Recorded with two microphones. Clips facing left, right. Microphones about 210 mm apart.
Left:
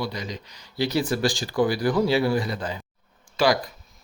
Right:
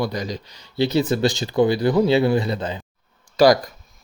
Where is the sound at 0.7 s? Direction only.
25° right (ahead or behind).